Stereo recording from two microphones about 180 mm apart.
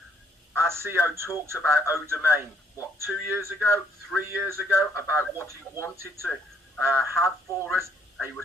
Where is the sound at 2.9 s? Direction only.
15° right (ahead or behind).